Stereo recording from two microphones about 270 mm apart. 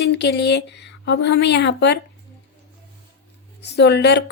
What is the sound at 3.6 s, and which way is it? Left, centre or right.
Speech, left.